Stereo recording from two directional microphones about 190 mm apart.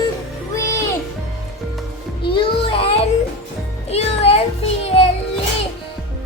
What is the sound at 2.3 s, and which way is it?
Music, 25° left (ahead or behind).